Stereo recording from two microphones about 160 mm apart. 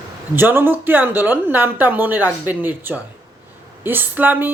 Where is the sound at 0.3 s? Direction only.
15° right (ahead or behind).